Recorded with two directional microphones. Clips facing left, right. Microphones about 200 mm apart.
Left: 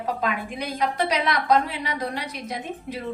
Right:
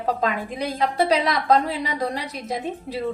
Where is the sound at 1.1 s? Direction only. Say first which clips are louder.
Right 1 dB; 35° right (ahead or behind).